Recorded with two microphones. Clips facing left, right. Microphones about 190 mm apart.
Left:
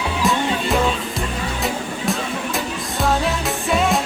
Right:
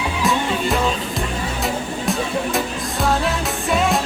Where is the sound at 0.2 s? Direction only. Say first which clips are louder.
Even; centre (ahead or behind).